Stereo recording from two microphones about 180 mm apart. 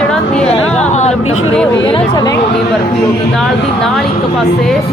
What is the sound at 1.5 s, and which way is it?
Speech, 5° left (ahead or behind).